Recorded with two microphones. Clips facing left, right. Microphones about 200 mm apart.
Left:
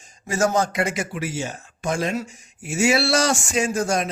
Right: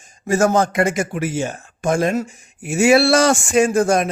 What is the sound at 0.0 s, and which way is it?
A woman's voice, 55° right (ahead or behind).